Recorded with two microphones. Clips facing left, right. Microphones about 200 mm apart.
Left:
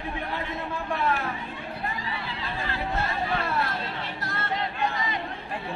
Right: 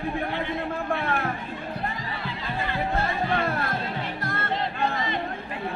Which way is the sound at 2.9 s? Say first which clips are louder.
Right 1 dB; 50° right (ahead or behind).